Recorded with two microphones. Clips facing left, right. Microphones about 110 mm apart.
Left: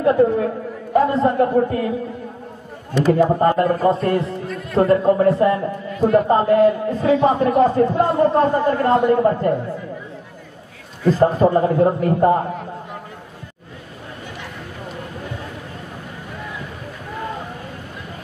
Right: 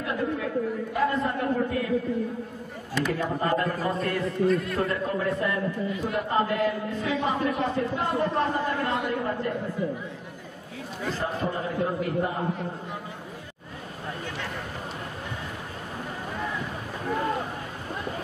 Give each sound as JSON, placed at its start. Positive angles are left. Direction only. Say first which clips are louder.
{"t": 0.0, "sound": "a sound", "louder": "left 13 dB", "side_deg": 40}
{"t": 0.9, "sound": "a man's voice", "louder": "left 12 dB", "side_deg": 30}
{"t": 3.0, "sound": "a man's voice", "louder": "left 12 dB", "side_deg": 35}
{"t": 11.1, "sound": "a man's voice", "louder": "left 15 dB", "side_deg": 45}